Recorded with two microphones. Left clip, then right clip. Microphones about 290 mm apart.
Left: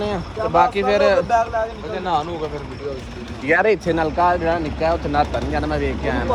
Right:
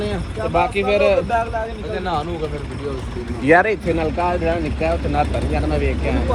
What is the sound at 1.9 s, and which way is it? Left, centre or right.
Speech, left.